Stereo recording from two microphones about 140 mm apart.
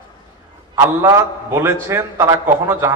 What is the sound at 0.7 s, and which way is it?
A man's voice, 25° right (ahead or behind).